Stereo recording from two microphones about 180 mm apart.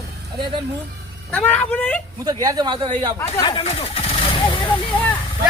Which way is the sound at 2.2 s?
20° right (ahead or behind).